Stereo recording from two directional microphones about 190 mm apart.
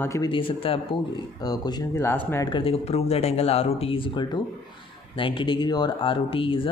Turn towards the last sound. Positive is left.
turn(degrees=30)  # may be behind; listen again after turning